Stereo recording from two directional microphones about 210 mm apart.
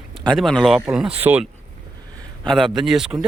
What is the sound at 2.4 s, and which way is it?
Speech, 5° left (ahead or behind).